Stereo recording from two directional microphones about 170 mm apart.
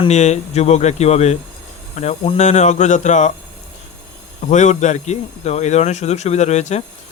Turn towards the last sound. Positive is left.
turn(degrees=40)  # may be behind; listen again after turning